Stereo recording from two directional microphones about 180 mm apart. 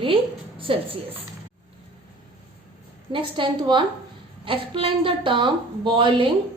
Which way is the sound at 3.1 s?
25° right (ahead or behind).